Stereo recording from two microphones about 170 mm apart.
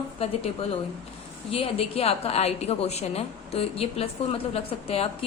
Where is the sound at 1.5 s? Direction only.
35° left (ahead or behind).